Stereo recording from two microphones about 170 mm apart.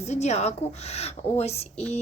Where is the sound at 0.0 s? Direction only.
40° left (ahead or behind).